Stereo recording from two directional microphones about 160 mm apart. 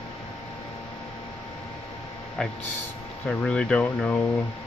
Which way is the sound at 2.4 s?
5° left (ahead or behind).